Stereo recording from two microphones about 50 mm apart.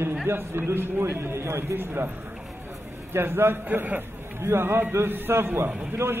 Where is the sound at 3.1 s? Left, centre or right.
Right.